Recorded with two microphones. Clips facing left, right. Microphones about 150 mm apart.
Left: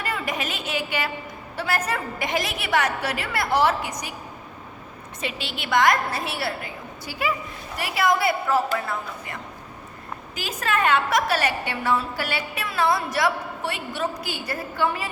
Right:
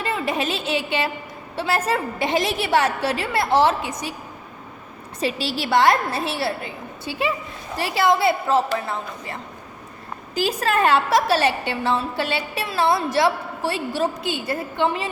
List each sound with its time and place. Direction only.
0.0 s a woman's voice: 25° right (ahead or behind)
5.2 s a woman's voice: 35° right (ahead or behind)